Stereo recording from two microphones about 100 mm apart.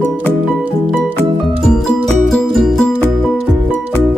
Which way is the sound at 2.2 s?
Centre (ahead or behind).